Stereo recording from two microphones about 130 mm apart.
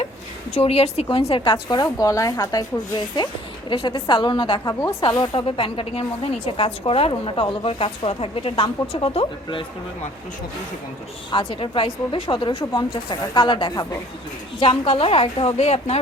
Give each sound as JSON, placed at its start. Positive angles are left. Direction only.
{"t": 0.6, "sound": "a woman's voice", "side_deg": 50}
{"t": 3.7, "sound": "speech", "side_deg": 40}
{"t": 4.7, "sound": "speech", "side_deg": 25}
{"t": 5.0, "sound": "a woman's voice", "side_deg": 40}
{"t": 11.3, "sound": "a woman's voice", "side_deg": 40}